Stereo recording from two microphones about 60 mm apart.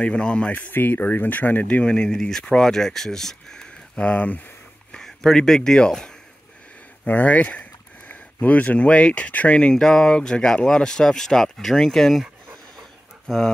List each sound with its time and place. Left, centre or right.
0.0 s speech: centre
0.5 s speech: left; by 3.7 s centre
3.9 s speech: left
4.9 s speech: centre
7.1 s speech: left; by 12.2 s centre
13.3 s speech: centre